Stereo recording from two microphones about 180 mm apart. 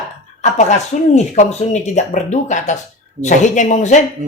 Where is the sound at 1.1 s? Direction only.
40° left (ahead or behind).